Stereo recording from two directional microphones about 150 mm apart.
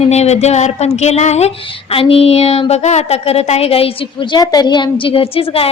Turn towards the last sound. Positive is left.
turn(degrees=40)  # may be behind; listen again after turning